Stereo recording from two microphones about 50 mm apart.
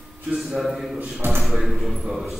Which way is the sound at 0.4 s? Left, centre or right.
Centre.